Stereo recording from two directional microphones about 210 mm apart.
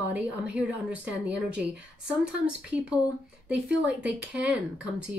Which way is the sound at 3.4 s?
5° right (ahead or behind).